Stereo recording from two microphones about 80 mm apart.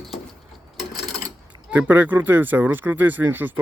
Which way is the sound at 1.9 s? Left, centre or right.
Right.